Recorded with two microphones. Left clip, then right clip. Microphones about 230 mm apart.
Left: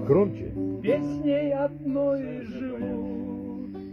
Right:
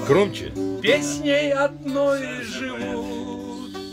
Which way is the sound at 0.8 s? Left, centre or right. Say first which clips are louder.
Right 6 dB; right.